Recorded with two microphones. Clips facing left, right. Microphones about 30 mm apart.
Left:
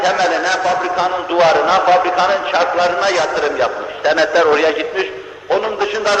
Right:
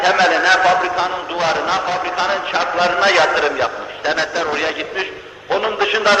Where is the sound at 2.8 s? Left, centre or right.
Centre.